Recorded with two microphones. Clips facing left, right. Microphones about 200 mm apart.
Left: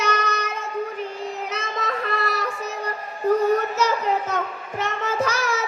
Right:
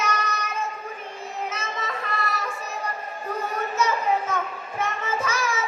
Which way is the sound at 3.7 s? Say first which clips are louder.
Left 1 dB; 70° left (ahead or behind).